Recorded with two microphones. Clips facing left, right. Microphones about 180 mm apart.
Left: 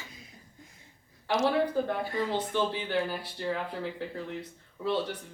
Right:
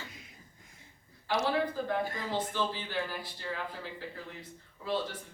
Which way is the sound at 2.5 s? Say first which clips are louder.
Left 5 dB; 65° left (ahead or behind).